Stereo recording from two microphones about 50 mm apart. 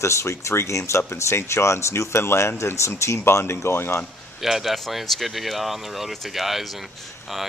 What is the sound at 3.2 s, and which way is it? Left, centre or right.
Speech, left.